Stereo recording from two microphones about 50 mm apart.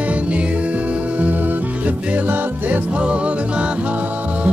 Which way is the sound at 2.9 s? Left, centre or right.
Right.